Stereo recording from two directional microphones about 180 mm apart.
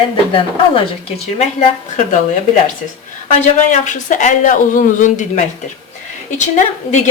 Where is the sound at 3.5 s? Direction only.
45° left (ahead or behind).